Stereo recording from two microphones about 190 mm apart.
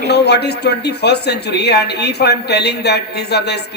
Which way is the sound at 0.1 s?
60° left (ahead or behind).